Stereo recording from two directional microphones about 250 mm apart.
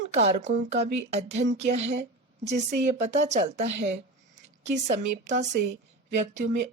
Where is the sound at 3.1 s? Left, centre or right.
Right.